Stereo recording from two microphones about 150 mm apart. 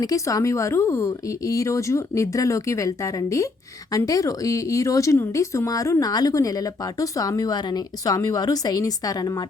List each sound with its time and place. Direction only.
0.0 s speech: 25° left (ahead or behind)